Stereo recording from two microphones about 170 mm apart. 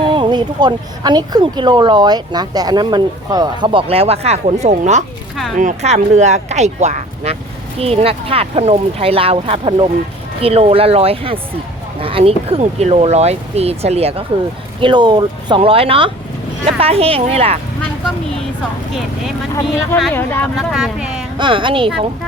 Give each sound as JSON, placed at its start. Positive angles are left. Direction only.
{"t": 0.1, "sound": "speech", "side_deg": -25}
{"t": 20.0, "sound": "speech", "side_deg": 5}
{"t": 21.3, "sound": "speech", "side_deg": -30}